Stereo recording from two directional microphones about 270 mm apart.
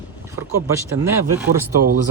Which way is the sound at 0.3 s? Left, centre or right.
Centre.